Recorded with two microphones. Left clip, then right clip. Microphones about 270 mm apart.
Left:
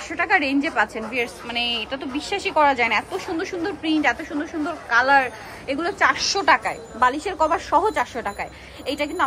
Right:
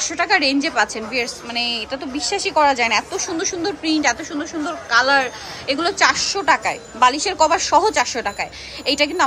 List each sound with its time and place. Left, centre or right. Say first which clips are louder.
0.0 s a woman's voice: right 3 dB; centre
0.4 s a woman's voice: right 4 dB; right
0.7 s a woman's voice: right 3 dB; centre
1.1 s a woman's voice: right 2 dB; right
2.5 s a woman's voice: right 2 dB; centre